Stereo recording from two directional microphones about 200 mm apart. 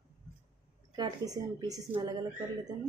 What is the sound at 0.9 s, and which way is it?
A woman's voice, 20° right (ahead or behind).